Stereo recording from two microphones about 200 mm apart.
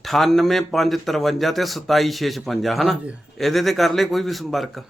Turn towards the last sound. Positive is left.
turn(degrees=0)  # may be behind; listen again after turning